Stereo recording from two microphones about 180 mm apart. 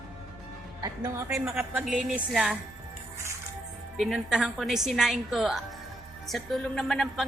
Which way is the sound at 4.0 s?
Centre (ahead or behind).